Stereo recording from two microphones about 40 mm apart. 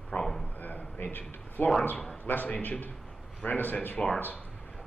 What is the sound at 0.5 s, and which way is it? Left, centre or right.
A man's voice, left.